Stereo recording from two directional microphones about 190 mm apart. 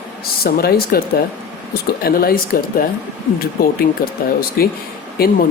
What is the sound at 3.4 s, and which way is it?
Speech, 50° left (ahead or behind).